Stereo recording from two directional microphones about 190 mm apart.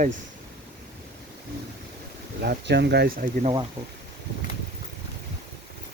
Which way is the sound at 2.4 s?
60° right (ahead or behind).